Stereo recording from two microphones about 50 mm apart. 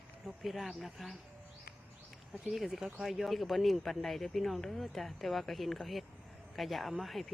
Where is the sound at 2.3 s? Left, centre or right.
Centre.